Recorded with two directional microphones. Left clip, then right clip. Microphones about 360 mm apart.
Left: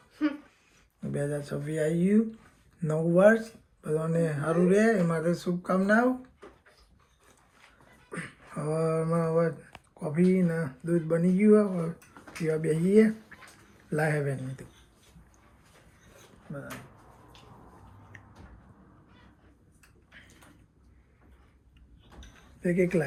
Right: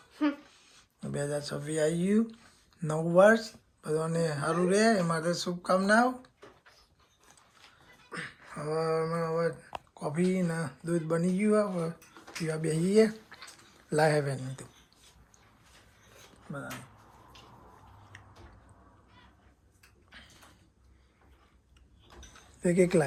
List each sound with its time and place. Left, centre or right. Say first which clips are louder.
0.1 s a sound: even; right
1.1 s speech: left 1 dB; centre
8.1 s speech: left 1 dB; centre
13.3 s a sound: right 1 dB; centre
13.9 s speech: right 3 dB; centre
22.6 s speech: right 1 dB; centre